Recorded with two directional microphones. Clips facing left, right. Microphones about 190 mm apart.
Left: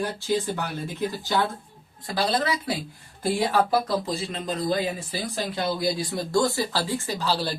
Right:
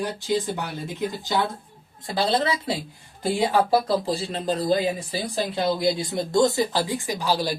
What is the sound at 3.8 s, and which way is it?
Speech, 30° right (ahead or behind).